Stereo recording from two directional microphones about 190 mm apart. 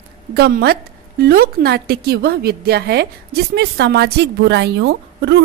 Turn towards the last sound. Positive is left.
turn(degrees=-65)  # may be behind; listen again after turning